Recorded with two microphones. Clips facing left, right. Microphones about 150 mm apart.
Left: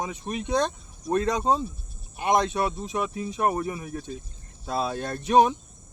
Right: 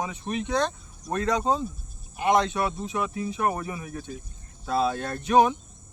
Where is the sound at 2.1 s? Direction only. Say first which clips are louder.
Right 1 dB; 25° left (ahead or behind).